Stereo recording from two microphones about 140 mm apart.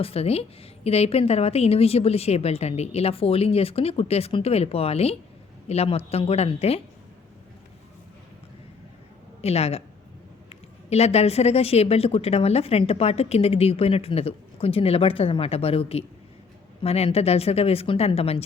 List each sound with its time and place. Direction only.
0.0 s a woman's voice: 45° left (ahead or behind)
9.4 s a woman's voice: 45° left (ahead or behind)